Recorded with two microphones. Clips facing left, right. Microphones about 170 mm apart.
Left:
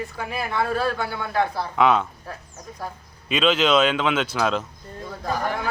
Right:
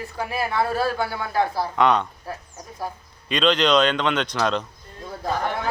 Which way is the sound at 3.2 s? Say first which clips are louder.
Even; 5° left (ahead or behind).